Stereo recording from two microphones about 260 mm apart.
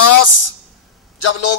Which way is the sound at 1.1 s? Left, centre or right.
Left.